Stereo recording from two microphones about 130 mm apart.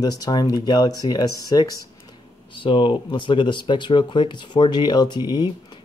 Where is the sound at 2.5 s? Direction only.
40° left (ahead or behind).